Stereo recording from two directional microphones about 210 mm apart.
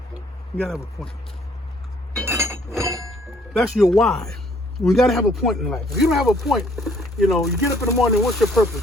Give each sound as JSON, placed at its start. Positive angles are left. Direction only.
{"t": 1.0, "sound": "speech", "side_deg": 0}
{"t": 2.2, "sound": "chink", "side_deg": -10}
{"t": 2.7, "sound": "a sound", "side_deg": -15}
{"t": 3.1, "sound": "speech", "side_deg": 0}